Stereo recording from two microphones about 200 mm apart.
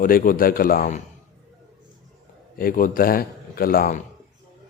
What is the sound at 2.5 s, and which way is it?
A man's voice, 45° left (ahead or behind).